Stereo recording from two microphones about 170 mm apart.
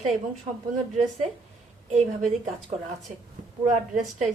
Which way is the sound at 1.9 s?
45° right (ahead or behind).